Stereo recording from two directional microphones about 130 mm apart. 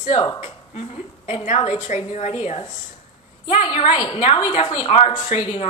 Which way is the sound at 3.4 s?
45° left (ahead or behind).